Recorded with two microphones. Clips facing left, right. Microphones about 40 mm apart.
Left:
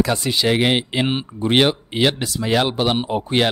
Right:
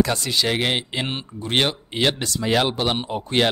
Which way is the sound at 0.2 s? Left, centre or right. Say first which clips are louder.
Left 4 dB; centre.